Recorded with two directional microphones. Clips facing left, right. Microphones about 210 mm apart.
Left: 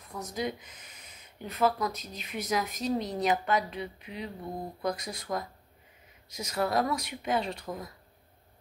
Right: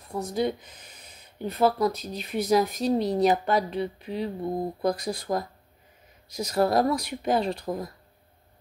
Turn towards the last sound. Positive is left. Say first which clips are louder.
# right 7 dB
turn(degrees=-35)  # may be behind; listen again after turning